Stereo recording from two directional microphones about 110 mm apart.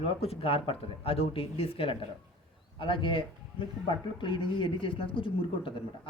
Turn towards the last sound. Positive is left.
turn(degrees=50)  # may be behind; listen again after turning